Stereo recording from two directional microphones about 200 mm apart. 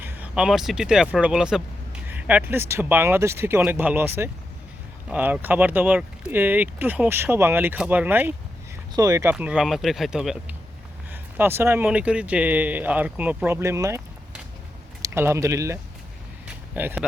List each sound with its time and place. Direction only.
0.0 s speech: 10° right (ahead or behind)
9.3 s speech: 5° right (ahead or behind)
16.5 s a sound: 10° right (ahead or behind)